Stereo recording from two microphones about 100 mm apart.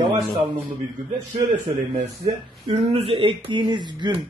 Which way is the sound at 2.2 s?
90° right.